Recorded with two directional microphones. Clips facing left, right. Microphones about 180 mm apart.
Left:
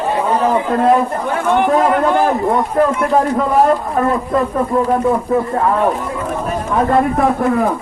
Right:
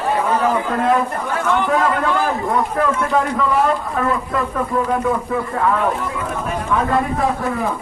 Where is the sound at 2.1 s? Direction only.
50° left (ahead or behind).